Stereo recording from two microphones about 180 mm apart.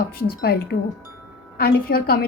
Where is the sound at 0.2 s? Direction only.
60° left (ahead or behind).